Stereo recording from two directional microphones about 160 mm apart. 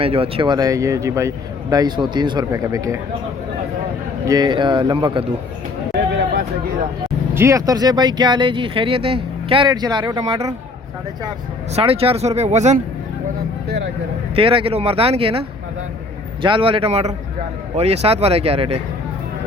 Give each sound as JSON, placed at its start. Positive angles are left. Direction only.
{"t": 0.0, "sound": "speech", "side_deg": -35}
{"t": 4.3, "sound": "speech", "side_deg": -25}
{"t": 6.1, "sound": "a sound", "side_deg": -90}
{"t": 7.3, "sound": "speech", "side_deg": -20}
{"t": 11.7, "sound": "speech", "side_deg": -40}
{"t": 14.3, "sound": "speech", "side_deg": -35}